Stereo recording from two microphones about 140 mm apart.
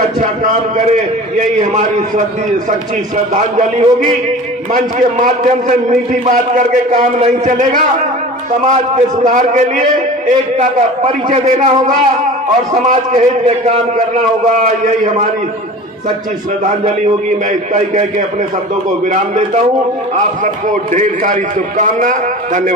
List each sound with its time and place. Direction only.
1.4 s a man's voice: 65° right (ahead or behind)
3.3 s a man's voice: 60° right (ahead or behind)
4.7 s a man's voice: 70° right (ahead or behind)
12.7 s a man's voice: 60° right (ahead or behind)
16.6 s a man's voice: 60° right (ahead or behind)
19.3 s a man's voice: 55° right (ahead or behind)
20.9 s a man's voice: 65° right (ahead or behind)